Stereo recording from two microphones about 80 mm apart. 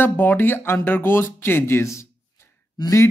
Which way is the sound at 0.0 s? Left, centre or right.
Left.